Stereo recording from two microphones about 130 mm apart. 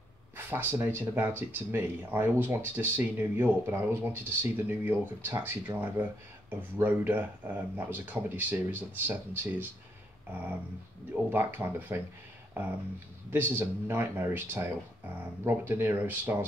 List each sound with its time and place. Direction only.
0.5 s speech: 15° right (ahead or behind)
11.2 s speech: 15° right (ahead or behind)
13.3 s speech: 15° right (ahead or behind)